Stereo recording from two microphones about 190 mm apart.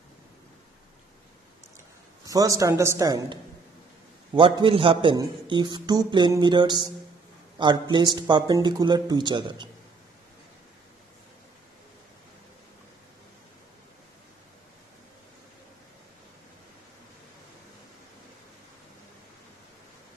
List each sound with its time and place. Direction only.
2.2 s a man's voice: 20° right (ahead or behind)